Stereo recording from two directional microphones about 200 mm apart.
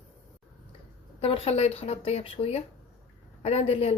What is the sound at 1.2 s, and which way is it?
A woman's voice, 30° left (ahead or behind).